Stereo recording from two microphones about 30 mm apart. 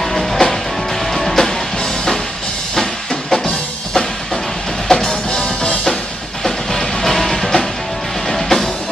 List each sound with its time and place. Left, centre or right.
0.0 s music: centre
4.8 s music: centre
5.4 s music: left
6.4 s music: centre